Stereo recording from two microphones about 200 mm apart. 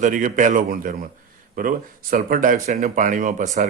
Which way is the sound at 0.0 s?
40° right (ahead or behind).